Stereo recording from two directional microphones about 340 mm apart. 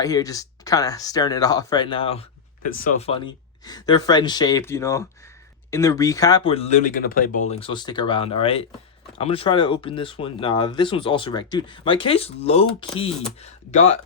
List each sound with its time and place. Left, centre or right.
0.0 s speech: centre